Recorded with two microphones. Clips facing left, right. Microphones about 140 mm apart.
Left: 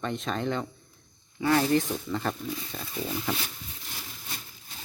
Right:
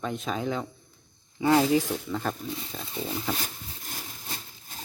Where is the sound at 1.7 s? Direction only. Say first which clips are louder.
Right 1 dB; 5° right (ahead or behind).